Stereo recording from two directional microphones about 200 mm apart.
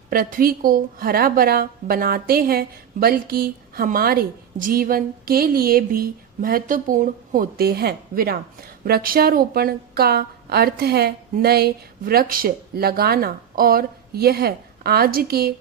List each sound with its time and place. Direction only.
0.1 s a woman's voice: 45° right (ahead or behind)